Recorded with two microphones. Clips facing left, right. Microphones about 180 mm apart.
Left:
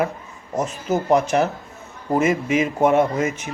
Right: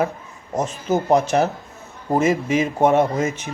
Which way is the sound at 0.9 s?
35° right (ahead or behind).